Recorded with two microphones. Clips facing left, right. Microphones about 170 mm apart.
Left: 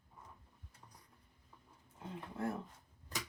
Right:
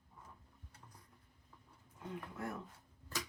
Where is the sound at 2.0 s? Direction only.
25° left (ahead or behind).